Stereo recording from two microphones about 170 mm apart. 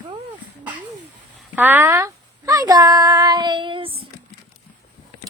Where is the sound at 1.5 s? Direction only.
10° right (ahead or behind); by 4.0 s 30° right (ahead or behind).